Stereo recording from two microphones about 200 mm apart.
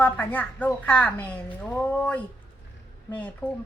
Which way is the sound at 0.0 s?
10° left (ahead or behind).